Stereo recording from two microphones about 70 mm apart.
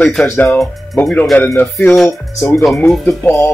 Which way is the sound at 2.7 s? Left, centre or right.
Centre.